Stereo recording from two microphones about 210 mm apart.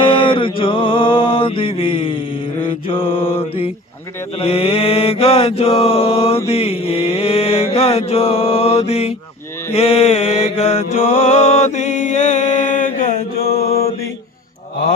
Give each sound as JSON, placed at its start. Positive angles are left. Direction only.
{"t": 0.0, "sound": "mantra", "side_deg": 25}
{"t": 13.5, "sound": "mantra", "side_deg": 30}